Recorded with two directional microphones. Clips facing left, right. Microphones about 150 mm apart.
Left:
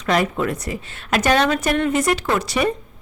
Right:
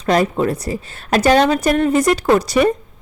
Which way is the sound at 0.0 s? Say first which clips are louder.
Right 4 dB; 35° right (ahead or behind).